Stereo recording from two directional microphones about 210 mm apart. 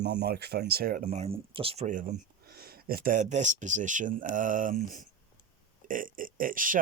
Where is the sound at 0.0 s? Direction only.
55° right (ahead or behind).